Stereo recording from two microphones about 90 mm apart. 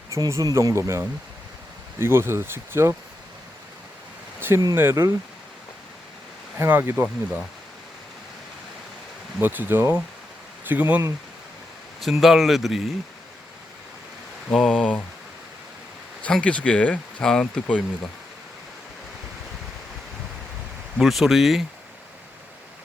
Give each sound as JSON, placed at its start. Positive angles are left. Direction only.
{"t": 0.1, "sound": "speech", "side_deg": -35}
{"t": 4.4, "sound": "a sound", "side_deg": -25}
{"t": 4.7, "sound": "speech", "side_deg": -30}
{"t": 6.6, "sound": "speech", "side_deg": -25}
{"t": 9.4, "sound": "speech", "side_deg": -20}
{"t": 11.9, "sound": "speech", "side_deg": 0}
{"t": 14.5, "sound": "speech", "side_deg": 10}
{"t": 16.2, "sound": "speech", "side_deg": 10}
{"t": 21.0, "sound": "speech", "side_deg": 0}